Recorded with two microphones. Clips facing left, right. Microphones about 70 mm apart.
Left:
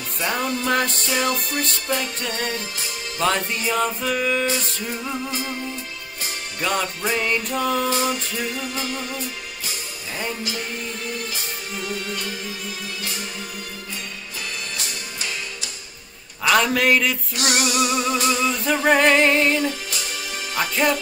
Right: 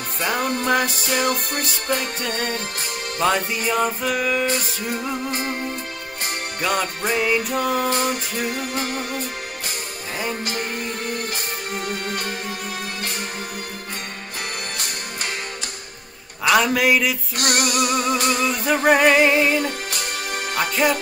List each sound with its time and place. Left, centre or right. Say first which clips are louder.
0.4 s music: right 2 dB; right
0.7 s music: right 1 dB; centre
1.9 s music: right 5 dB; right
3.2 s music: right 1 dB; centre
5.3 s music: right 3 dB; right
6.6 s music: even; centre
7.7 s music: even; right
11.1 s music: right 3 dB; right
16.4 s music: right 1 dB; centre
17.4 s music: even; right
18.9 s music: right 1 dB; centre
19.6 s music: even; right
20.8 s music: right 1 dB; centre